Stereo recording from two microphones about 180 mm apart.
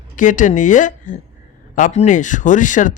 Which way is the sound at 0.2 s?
45° left (ahead or behind).